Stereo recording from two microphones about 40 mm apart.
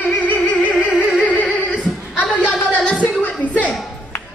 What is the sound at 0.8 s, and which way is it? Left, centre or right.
Music, right.